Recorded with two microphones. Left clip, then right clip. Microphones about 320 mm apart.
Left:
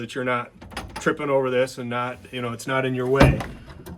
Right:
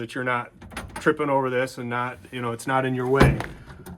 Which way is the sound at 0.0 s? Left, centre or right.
Centre.